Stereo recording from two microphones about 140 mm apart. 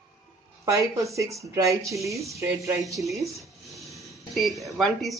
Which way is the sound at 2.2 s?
20° right (ahead or behind).